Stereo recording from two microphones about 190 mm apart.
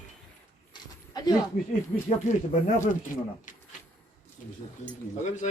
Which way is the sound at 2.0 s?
40° left (ahead or behind).